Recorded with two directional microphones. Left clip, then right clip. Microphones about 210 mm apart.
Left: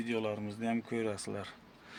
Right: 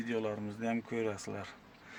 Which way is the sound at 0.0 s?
20° left (ahead or behind).